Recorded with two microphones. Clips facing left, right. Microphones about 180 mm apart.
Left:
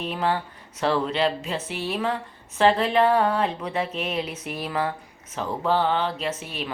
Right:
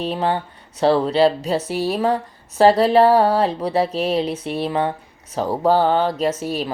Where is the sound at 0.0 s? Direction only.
30° right (ahead or behind).